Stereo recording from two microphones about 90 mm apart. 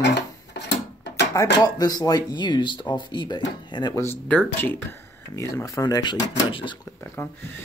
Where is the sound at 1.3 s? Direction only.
40° left (ahead or behind).